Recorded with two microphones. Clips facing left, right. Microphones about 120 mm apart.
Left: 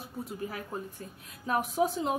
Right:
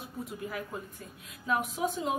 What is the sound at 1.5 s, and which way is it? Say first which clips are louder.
Speech: left 3 dB; 35° left (ahead or behind).